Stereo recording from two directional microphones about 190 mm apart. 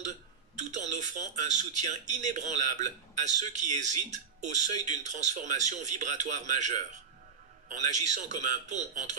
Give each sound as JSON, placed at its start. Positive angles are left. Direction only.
{"t": 0.6, "sound": "speech", "side_deg": -40}